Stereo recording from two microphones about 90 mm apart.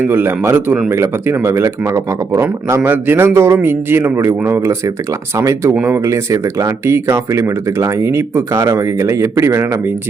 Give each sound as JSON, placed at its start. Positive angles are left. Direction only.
{"t": 0.0, "sound": "a man's voice", "side_deg": -25}